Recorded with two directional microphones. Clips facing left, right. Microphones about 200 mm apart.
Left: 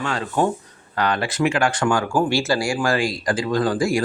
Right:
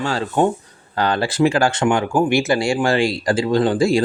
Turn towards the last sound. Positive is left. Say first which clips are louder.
# right 4 dB
turn(degrees=-25)  # may be behind; listen again after turning